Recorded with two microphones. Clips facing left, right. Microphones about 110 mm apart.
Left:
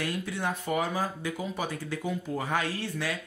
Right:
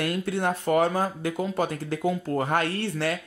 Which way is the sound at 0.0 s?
60° right (ahead or behind).